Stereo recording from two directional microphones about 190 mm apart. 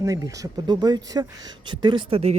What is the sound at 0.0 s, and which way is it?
Speech, 20° right (ahead or behind).